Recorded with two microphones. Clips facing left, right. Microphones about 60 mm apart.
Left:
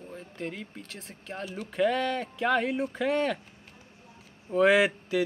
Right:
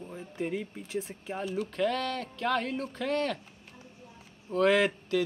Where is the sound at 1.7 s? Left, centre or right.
Centre.